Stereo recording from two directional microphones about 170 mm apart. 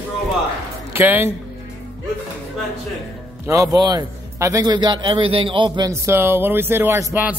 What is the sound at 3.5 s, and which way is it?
A man's voice, 20° right (ahead or behind).